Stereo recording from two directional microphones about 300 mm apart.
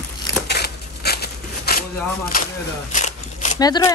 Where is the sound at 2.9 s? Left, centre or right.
Left.